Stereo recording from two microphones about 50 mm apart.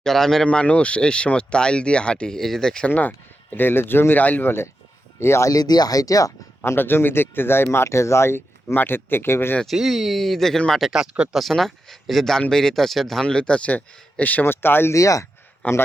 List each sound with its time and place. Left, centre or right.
0.0 s speech: centre
0.4 s speech: left
2.8 s speech: left
4.2 s speech: left
5.2 s speech: left
6.7 s speech: left
7.9 s speech: left
8.6 s speech: left
9.6 s speech: centre
13.2 s speech: centre
14.4 s speech: left
14.9 s speech: left
15.6 s speech: left